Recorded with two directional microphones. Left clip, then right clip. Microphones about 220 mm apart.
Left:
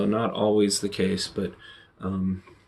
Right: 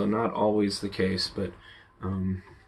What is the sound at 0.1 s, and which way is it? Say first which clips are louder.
Speech: left 1 dB; 20° left (ahead or behind).